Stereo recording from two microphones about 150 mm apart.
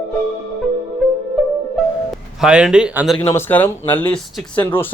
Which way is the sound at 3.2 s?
15° left (ahead or behind).